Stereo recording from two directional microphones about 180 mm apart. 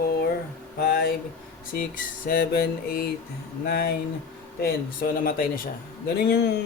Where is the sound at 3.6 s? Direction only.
60° left (ahead or behind).